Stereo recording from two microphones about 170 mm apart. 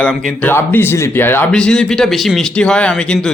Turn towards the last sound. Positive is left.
turn(degrees=5)  # may be behind; listen again after turning